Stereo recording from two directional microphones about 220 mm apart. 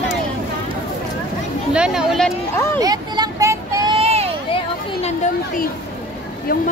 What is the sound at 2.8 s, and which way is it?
Vehicle, 15° right (ahead or behind).